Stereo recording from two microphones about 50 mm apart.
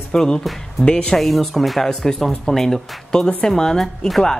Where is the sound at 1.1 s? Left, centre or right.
Centre.